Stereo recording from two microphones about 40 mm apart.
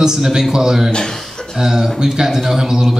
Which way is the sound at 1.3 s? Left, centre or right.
Centre.